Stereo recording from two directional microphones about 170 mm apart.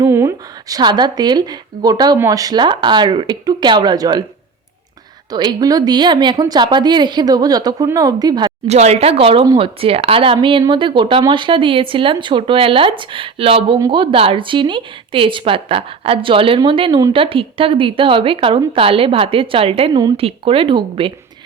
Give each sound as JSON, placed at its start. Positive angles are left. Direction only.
{"t": 0.0, "sound": "speech", "side_deg": -15}
{"t": 5.3, "sound": "speech", "side_deg": -25}
{"t": 8.6, "sound": "speech", "side_deg": -40}